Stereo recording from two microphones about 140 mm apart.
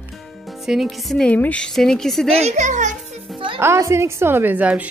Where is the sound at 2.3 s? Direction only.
55° right (ahead or behind).